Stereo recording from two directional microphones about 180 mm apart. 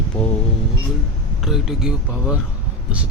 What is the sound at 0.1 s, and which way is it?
Music, 5° left (ahead or behind).